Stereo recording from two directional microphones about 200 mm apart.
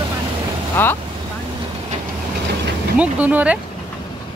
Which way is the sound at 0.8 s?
10° left (ahead or behind).